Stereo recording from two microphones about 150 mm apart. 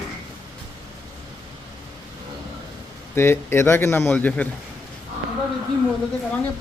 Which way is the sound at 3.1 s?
15° left (ahead or behind).